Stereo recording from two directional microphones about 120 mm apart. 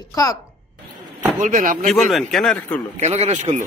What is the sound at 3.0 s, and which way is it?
Speech, 65° right (ahead or behind).